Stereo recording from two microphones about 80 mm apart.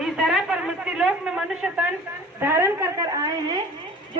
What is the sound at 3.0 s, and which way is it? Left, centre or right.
Speech, right.